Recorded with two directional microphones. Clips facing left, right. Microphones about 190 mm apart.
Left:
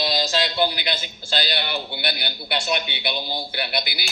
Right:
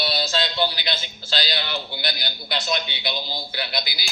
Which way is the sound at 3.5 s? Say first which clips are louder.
Left 2 dB; 60° left (ahead or behind).